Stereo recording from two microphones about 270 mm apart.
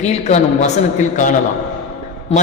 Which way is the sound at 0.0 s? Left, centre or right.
Left.